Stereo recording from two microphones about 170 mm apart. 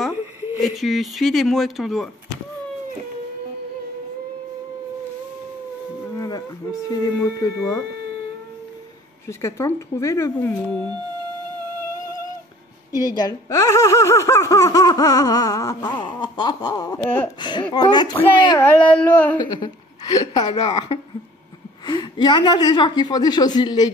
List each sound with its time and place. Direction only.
0.6 s speech: centre (ahead or behind)
6.1 s speech: 20° left (ahead or behind)
9.3 s speech: 15° left (ahead or behind)
12.9 s speech: 20° left (ahead or behind)
17.4 s speech: 25° left (ahead or behind)
18.6 s speech: 10° left (ahead or behind)
19.3 s a woman's voice: 25° left (ahead or behind)
20.6 s a woman's voice: 40° left (ahead or behind)
21.8 s speech: 25° left (ahead or behind)